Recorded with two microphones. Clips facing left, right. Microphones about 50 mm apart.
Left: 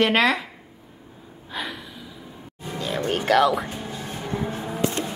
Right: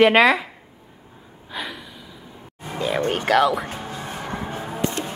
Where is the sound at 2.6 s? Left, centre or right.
Right.